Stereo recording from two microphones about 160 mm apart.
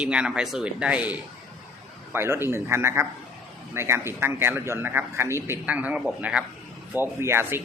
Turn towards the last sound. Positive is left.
turn(degrees=-15)  # may be behind; listen again after turning